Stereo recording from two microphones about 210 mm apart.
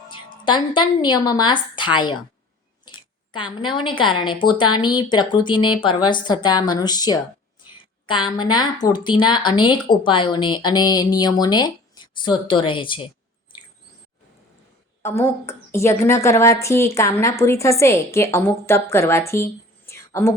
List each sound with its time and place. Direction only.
0.1 s a woman's voice: 20° left (ahead or behind)
15.0 s a woman's voice: 10° left (ahead or behind)